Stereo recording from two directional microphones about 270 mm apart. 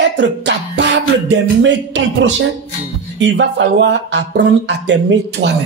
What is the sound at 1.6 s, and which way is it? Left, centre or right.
Speech, right.